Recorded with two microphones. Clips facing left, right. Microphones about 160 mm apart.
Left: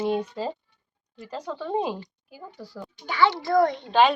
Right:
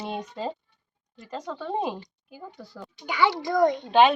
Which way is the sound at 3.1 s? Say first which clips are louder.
Left 2 dB; 15° right (ahead or behind).